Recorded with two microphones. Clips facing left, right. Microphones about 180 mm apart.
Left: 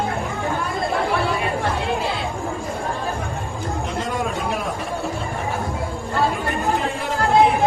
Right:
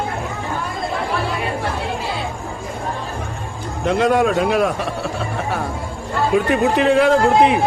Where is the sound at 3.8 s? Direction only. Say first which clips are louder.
Right 12 dB; 70° right (ahead or behind).